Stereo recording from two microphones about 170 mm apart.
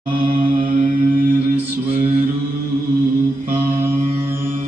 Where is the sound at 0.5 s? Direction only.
50° right (ahead or behind).